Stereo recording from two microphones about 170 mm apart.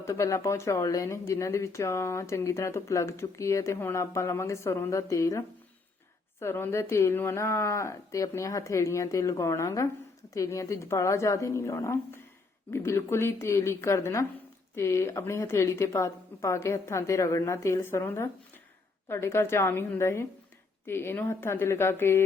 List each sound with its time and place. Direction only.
0.0 s speech: 15° left (ahead or behind)
6.4 s speech: 15° left (ahead or behind)